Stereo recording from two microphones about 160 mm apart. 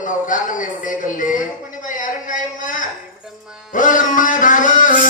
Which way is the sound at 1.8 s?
55° left (ahead or behind).